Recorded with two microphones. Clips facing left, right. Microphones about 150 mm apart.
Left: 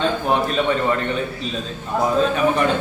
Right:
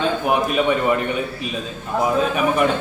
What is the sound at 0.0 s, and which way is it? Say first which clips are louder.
A man's voice: even; 10° right (ahead or behind).